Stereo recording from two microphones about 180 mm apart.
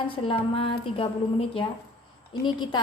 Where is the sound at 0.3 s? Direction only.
30° left (ahead or behind).